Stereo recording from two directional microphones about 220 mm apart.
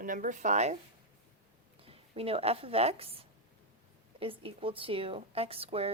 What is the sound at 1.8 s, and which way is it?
A woman's voice, 25° right (ahead or behind).